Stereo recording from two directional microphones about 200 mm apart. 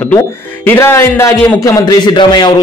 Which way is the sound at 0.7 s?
10° left (ahead or behind).